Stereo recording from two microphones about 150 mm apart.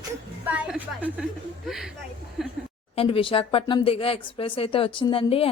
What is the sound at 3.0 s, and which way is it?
A woman's voice, 35° left (ahead or behind).